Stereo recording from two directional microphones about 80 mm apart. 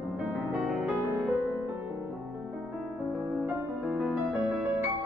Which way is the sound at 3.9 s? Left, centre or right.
Centre.